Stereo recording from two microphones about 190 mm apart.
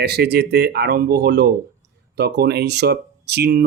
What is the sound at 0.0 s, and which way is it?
Speech, 60° right (ahead or behind).